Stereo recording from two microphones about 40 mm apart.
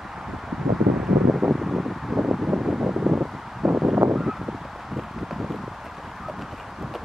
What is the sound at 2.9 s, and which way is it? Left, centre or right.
Wind, right.